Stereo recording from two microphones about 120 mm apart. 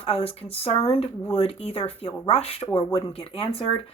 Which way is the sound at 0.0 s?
55° left (ahead or behind).